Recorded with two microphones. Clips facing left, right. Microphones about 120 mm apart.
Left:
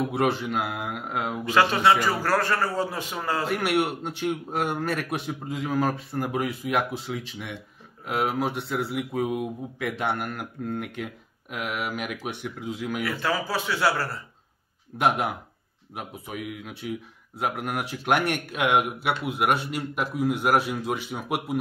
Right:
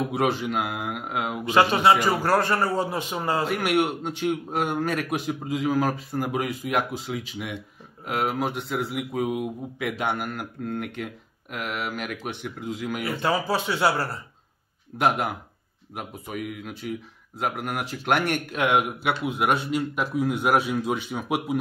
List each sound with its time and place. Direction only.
0.1 s speech: centre (ahead or behind)
1.4 s a man's voice: 20° right (ahead or behind)
3.5 s speech: 5° left (ahead or behind)
13.0 s a man's voice: 25° right (ahead or behind)
15.0 s speech: centre (ahead or behind)